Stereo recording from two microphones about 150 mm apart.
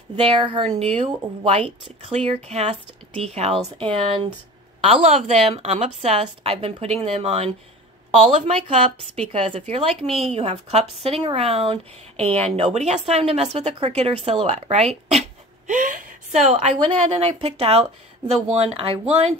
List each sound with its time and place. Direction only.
0.2 s speech: 35° right (ahead or behind)
0.7 s a woman's voice: 45° right (ahead or behind)
16.7 s a woman's voice: 35° right (ahead or behind)